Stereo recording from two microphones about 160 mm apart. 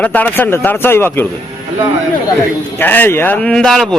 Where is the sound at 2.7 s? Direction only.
10° left (ahead or behind).